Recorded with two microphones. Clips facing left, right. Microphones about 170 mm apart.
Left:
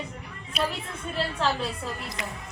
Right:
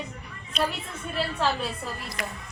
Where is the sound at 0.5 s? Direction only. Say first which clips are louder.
Right 1 dB; 5° left (ahead or behind).